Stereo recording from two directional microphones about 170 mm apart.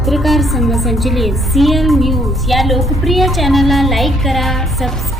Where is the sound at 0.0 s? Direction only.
Centre (ahead or behind).